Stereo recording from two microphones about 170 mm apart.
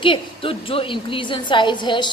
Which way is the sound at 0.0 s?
30° left (ahead or behind).